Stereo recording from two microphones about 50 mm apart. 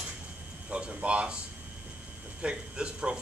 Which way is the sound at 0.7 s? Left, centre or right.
Right.